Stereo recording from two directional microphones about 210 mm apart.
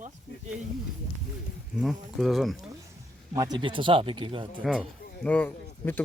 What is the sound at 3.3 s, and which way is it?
Speech, 20° right (ahead or behind).